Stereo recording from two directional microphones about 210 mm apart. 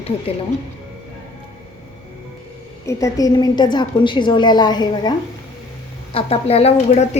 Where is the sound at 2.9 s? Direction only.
15° left (ahead or behind); by 7.0 s 30° left (ahead or behind).